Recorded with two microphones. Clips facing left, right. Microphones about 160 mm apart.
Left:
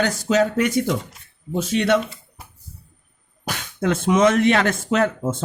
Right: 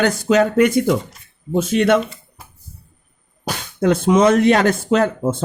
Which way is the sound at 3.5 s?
35° right (ahead or behind).